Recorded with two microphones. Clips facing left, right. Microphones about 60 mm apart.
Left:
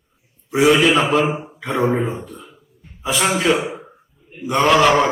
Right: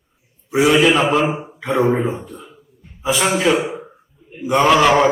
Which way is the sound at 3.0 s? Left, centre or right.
Centre.